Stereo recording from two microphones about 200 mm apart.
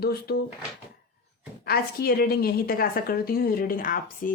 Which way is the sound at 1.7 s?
50° left (ahead or behind).